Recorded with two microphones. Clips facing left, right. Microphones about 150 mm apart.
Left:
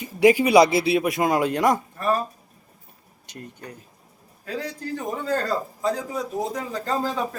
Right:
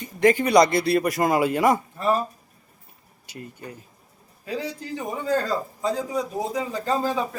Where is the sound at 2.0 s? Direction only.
20° right (ahead or behind).